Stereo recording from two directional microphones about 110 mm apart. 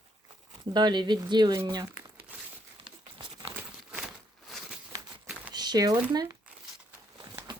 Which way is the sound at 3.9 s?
5° right (ahead or behind).